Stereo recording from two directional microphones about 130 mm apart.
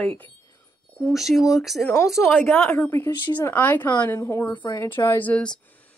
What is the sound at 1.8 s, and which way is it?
A woman's voice, 20° left (ahead or behind).